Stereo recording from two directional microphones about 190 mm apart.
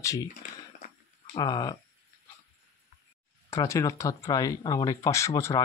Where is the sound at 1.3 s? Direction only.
20° left (ahead or behind).